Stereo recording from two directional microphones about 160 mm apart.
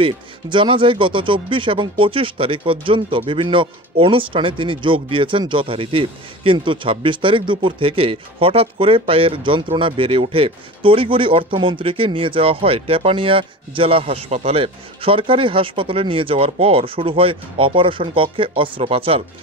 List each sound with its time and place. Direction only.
0.0 s speech: 30° right (ahead or behind)